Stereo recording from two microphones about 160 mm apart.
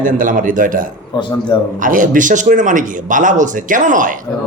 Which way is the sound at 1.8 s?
55° right (ahead or behind).